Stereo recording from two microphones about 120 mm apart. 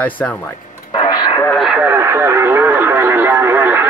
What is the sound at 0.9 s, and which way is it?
Radio, 45° left (ahead or behind).